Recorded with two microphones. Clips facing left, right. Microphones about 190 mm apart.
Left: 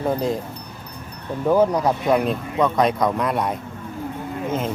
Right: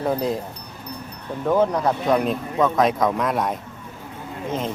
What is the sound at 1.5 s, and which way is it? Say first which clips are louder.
Speech: left 2 dB; 5° left (ahead or behind).